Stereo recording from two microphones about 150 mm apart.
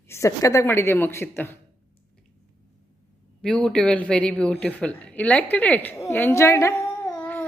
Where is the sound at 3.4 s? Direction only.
5° left (ahead or behind).